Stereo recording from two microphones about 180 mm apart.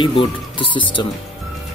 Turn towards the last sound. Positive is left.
turn(degrees=30)  # may be behind; listen again after turning